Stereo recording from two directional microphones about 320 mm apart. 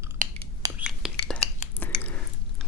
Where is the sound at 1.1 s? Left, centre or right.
Centre.